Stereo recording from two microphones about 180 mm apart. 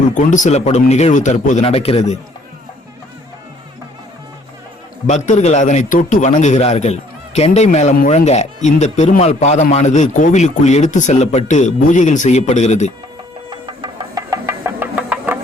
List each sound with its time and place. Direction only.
0.1 s a man's voice: 45° left (ahead or behind)
5.0 s a man's voice: 40° left (ahead or behind)
13.5 s music: 25° right (ahead or behind)